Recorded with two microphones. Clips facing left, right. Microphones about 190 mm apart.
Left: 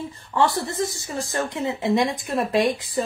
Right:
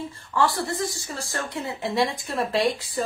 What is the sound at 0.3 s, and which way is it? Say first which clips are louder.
Speech: left 2 dB; 20° left (ahead or behind).